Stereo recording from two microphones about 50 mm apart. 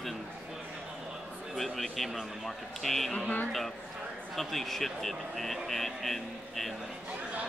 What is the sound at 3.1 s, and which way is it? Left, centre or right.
Speech, left.